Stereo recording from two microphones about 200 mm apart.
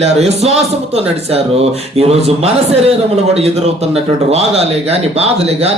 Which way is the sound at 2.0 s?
30° right (ahead or behind).